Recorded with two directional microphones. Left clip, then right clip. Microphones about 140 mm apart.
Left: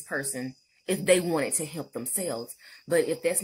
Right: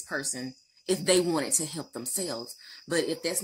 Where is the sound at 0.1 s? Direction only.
25° left (ahead or behind).